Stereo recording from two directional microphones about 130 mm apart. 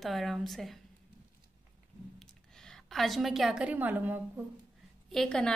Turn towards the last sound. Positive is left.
turn(degrees=5)  # may be behind; listen again after turning